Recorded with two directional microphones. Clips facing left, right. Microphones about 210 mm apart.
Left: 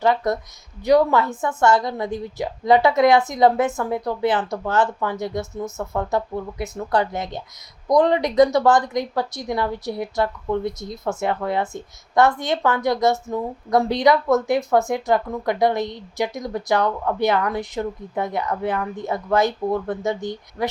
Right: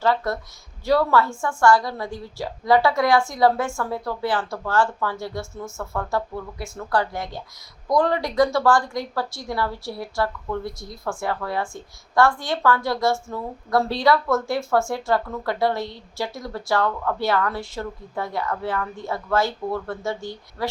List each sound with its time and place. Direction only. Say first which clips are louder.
0.0 s a woman's voice: left 3 dB; 20° left (ahead or behind)